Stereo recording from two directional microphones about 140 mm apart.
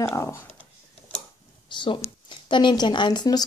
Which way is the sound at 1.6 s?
35° left (ahead or behind).